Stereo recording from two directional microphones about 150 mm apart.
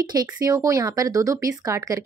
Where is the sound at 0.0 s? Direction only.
25° right (ahead or behind).